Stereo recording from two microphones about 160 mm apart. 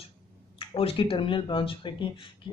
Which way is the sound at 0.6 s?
35° left (ahead or behind).